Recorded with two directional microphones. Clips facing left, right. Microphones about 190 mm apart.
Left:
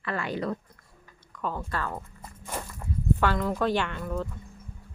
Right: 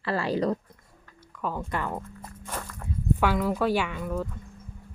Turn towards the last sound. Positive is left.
turn(degrees=-5)  # may be behind; listen again after turning